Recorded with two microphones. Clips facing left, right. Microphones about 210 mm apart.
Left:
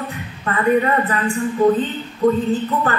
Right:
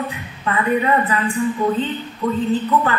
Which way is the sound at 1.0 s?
45° left (ahead or behind).